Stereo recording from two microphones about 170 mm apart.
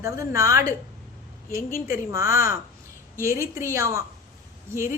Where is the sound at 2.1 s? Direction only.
20° right (ahead or behind).